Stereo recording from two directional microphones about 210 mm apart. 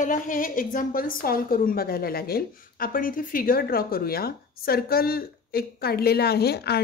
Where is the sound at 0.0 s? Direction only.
40° left (ahead or behind).